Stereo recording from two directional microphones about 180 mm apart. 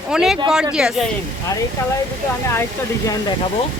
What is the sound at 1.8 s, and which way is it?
Speech, 20° left (ahead or behind).